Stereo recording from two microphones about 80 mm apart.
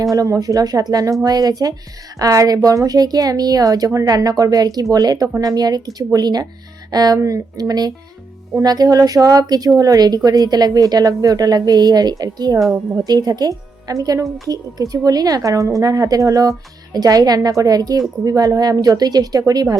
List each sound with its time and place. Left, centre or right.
0.0 s a woman's voice: right
7.2 s a woman's voice: right